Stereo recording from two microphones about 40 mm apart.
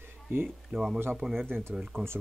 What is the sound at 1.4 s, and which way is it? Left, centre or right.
Speech, right.